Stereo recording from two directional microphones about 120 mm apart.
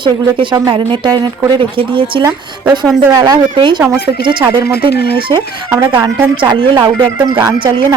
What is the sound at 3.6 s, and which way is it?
Speech, 40° right (ahead or behind).